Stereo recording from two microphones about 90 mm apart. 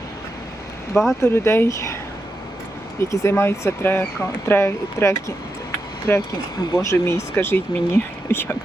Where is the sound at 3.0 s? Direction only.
30° left (ahead or behind).